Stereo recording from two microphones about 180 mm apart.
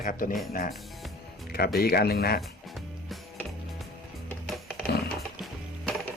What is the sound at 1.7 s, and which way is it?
Speech, 60° left (ahead or behind).